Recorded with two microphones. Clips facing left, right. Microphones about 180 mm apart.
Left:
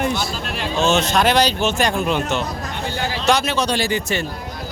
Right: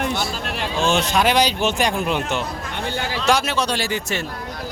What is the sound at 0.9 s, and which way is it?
A man's voice, 10° right (ahead or behind).